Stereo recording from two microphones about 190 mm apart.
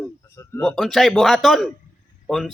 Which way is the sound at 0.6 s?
5° left (ahead or behind).